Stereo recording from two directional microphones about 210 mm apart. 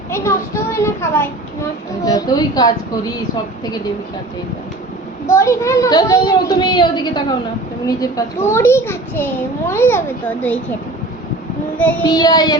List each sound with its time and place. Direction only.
0.1 s a child's voice: 15° left (ahead or behind)
5.2 s a child's voice: 15° left (ahead or behind)
12.0 s child singing: 20° left (ahead or behind)